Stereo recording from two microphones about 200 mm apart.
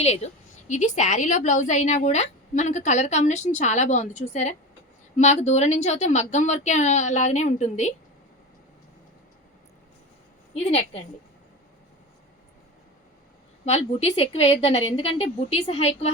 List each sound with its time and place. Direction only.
0.0 s a woman's voice: 30° left (ahead or behind)
13.7 s a woman's voice: 30° left (ahead or behind)